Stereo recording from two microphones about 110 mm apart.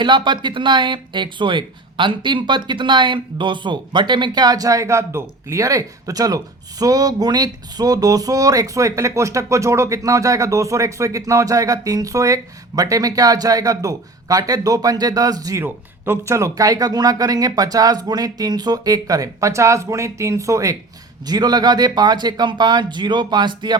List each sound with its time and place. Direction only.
0.0 s speech: 45° right (ahead or behind)